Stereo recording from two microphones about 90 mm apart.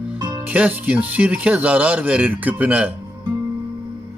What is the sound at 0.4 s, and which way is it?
Speech, 15° right (ahead or behind).